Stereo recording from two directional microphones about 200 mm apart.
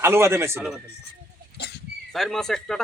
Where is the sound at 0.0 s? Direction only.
10° right (ahead or behind).